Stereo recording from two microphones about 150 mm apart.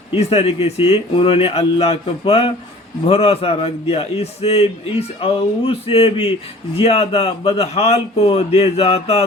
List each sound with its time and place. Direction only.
0.1 s a man's voice: 40° left (ahead or behind)